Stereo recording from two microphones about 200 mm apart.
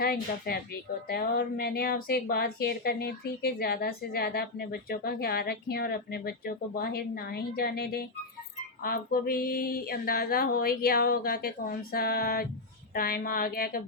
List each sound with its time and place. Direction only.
0.0 s speech: 50° left (ahead or behind)